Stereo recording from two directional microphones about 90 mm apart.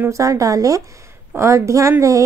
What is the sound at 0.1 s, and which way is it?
A woman's voice, 35° right (ahead or behind).